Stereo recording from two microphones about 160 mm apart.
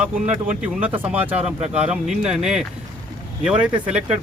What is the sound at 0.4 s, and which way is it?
A man's voice, 10° right (ahead or behind).